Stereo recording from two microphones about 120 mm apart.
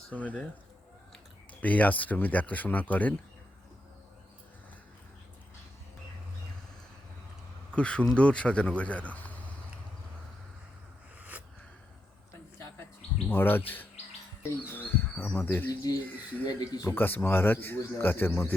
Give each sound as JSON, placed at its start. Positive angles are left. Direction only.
{"t": 0.1, "sound": "speech", "side_deg": 15}
{"t": 1.6, "sound": "speech", "side_deg": 10}
{"t": 7.8, "sound": "speech", "side_deg": 10}
{"t": 11.2, "sound": "a sound", "side_deg": -10}
{"t": 13.2, "sound": "speech", "side_deg": 15}
{"t": 16.5, "sound": "speech", "side_deg": 35}
{"t": 16.8, "sound": "speech", "side_deg": 20}